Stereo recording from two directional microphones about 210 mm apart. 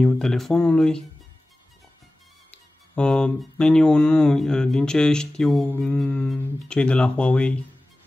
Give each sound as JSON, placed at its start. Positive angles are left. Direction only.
{"t": 0.0, "sound": "speech", "side_deg": 5}
{"t": 2.5, "sound": "speech", "side_deg": 5}